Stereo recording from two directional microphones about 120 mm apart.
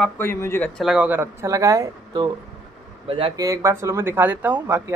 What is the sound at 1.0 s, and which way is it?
Speech, 15° right (ahead or behind).